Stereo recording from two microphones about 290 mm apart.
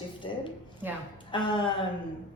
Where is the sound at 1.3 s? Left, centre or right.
Centre.